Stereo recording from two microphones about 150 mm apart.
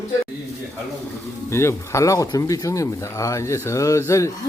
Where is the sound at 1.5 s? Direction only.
15° left (ahead or behind).